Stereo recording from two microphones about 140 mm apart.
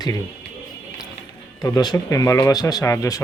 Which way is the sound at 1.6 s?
30° left (ahead or behind).